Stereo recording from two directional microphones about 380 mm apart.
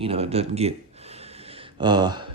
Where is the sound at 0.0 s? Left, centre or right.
Centre.